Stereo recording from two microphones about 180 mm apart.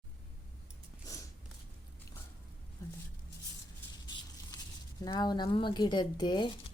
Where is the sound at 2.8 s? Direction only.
15° left (ahead or behind).